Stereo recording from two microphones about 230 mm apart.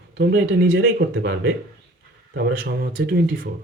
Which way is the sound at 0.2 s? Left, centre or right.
Right.